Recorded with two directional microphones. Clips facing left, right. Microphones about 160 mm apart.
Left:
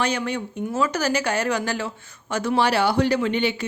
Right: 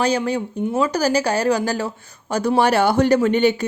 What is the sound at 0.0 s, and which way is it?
A woman's voice, 35° right (ahead or behind).